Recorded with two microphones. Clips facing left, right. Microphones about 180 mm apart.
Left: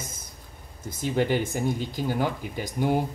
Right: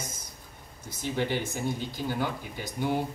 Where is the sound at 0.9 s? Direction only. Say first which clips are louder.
Left 5 dB; 50° left (ahead or behind).